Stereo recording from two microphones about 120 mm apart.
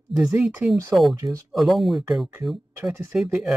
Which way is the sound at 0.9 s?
Centre (ahead or behind).